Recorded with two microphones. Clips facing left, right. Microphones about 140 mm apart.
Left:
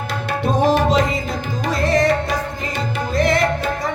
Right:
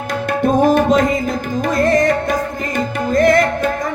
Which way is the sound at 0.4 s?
50° right (ahead or behind).